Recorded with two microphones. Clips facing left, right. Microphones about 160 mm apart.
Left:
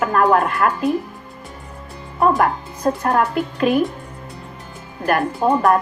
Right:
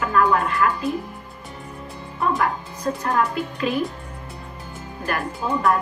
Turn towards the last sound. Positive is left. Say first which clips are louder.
# left 6 dB
turn(degrees=55)  # may be behind; listen again after turning